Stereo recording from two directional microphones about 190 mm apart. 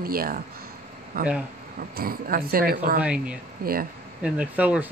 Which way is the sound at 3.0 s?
5° right (ahead or behind).